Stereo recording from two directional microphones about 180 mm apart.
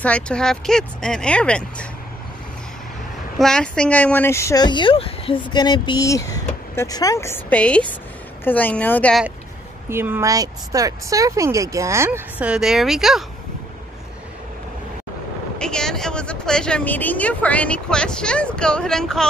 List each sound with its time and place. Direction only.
0.0 s speech: 5° left (ahead or behind)
3.3 s speech: 5° left (ahead or behind)
9.8 s speech: 10° right (ahead or behind)
15.6 s speech: 5° left (ahead or behind)